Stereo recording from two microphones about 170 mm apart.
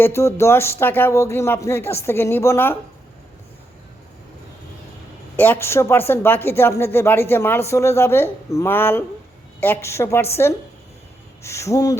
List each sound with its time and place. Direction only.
0.0 s speech: 15° left (ahead or behind)
5.4 s speech: 10° left (ahead or behind)
11.4 s speech: 15° left (ahead or behind)